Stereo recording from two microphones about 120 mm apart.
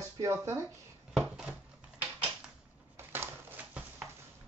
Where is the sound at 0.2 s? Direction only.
25° right (ahead or behind).